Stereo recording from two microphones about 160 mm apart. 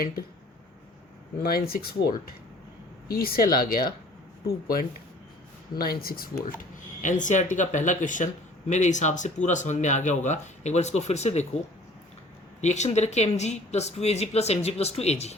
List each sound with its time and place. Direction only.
1.4 s speech: 70° left (ahead or behind); by 11.4 s 45° left (ahead or behind)
12.6 s speech: 45° left (ahead or behind)